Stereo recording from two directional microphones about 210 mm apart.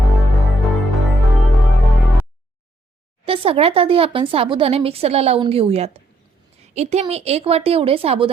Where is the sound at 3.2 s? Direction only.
25° right (ahead or behind).